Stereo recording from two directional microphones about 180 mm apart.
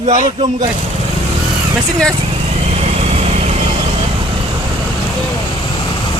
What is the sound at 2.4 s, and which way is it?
Vehicle, 35° right (ahead or behind).